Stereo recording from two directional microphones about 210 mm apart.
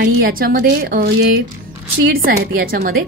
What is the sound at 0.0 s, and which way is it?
A woman's voice, 45° right (ahead or behind).